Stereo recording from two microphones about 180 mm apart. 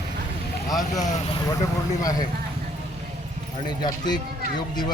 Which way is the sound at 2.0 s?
20° left (ahead or behind).